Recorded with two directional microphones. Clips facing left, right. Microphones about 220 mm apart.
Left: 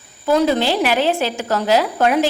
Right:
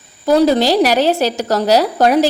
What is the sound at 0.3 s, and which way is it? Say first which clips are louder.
Speech: right 4 dB; 35° right (ahead or behind).